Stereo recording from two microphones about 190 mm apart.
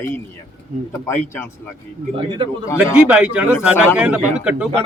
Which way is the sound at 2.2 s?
25° right (ahead or behind).